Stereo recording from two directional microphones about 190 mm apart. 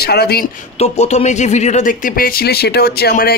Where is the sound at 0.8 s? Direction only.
35° left (ahead or behind).